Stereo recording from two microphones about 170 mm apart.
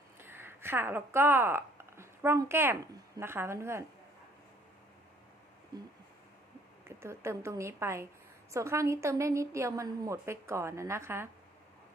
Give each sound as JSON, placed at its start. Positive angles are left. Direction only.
{"t": 0.2, "sound": "speech", "side_deg": -15}
{"t": 6.8, "sound": "a woman's voice", "side_deg": -15}